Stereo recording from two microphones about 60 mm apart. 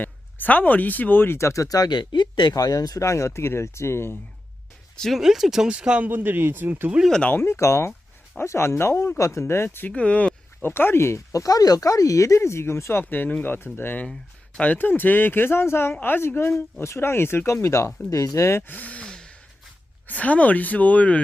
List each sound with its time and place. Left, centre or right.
0.0 s speech: left
1.6 s speech: left
5.1 s speech: centre
6.1 s speech: right
7.3 s speech: left
9.9 s speech: left
10.6 s speech: left
14.1 s speech: left
18.3 s speech: left
18.7 s a sound: left
20.1 s speech: left